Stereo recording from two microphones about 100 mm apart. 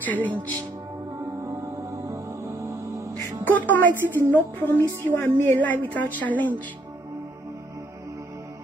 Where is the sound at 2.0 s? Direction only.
30° right (ahead or behind).